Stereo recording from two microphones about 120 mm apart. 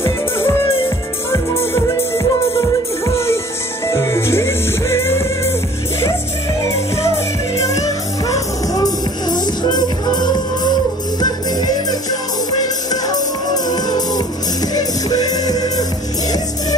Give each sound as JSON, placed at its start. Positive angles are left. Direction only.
{"t": 0.0, "sound": "music", "side_deg": 20}
{"t": 3.8, "sound": "music", "side_deg": 25}
{"t": 7.5, "sound": "music", "side_deg": 25}